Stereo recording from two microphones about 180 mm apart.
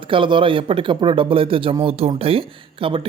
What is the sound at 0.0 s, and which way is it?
Speech, 30° right (ahead or behind).